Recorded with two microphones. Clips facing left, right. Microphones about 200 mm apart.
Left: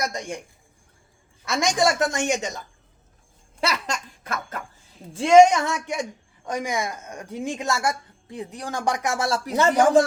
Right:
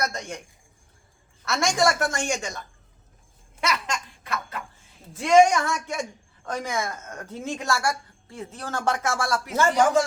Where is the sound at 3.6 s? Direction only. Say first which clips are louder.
Left 1 dB; 35° left (ahead or behind).